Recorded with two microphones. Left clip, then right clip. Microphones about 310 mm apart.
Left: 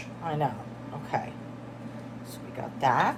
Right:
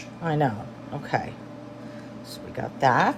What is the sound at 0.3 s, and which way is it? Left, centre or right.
Speech, right.